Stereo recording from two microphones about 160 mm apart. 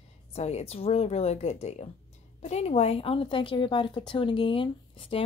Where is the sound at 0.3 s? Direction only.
40° left (ahead or behind).